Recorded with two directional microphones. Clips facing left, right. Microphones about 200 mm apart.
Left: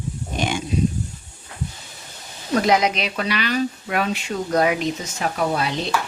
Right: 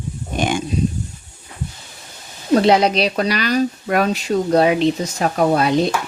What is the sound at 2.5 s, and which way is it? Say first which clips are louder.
Speech: right 5 dB; 30° right (ahead or behind).